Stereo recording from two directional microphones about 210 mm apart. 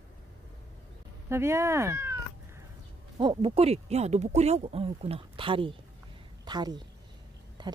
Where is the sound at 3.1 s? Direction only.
25° right (ahead or behind).